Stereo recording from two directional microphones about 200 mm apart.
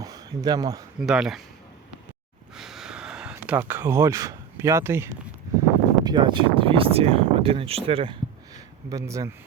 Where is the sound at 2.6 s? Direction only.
Centre (ahead or behind).